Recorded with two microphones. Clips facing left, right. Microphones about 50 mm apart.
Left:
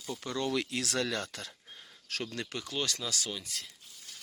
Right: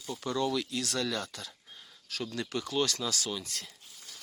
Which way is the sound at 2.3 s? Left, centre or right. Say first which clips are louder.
Right 8 dB; left.